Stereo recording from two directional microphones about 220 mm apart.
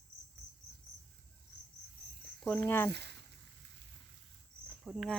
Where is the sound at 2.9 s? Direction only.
50° right (ahead or behind).